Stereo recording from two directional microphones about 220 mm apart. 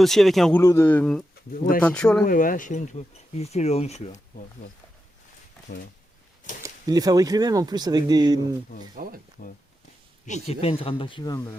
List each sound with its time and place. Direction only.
0.0 s speech: centre (ahead or behind)
2.2 s speech: 40° left (ahead or behind)
6.6 s speech: 15° right (ahead or behind)
9.0 s speech: 40° right (ahead or behind)
9.4 s speech: 40° left (ahead or behind); by 11.5 s 15° left (ahead or behind)